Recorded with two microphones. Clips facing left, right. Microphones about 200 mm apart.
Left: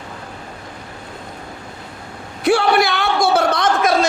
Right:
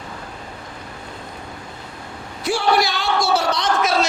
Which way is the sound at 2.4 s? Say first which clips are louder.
Left 4 dB; 60° left (ahead or behind).